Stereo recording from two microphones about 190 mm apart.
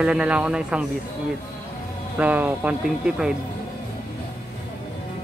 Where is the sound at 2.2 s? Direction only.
10° right (ahead or behind).